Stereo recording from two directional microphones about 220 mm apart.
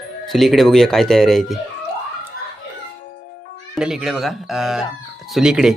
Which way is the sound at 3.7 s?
5° right (ahead or behind).